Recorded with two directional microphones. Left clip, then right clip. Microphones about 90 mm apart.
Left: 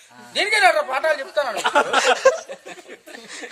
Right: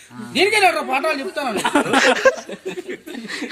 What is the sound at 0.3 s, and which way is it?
Speech, 50° left (ahead or behind).